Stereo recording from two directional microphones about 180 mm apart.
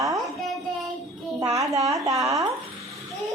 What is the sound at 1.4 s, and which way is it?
A child's voice, 20° right (ahead or behind).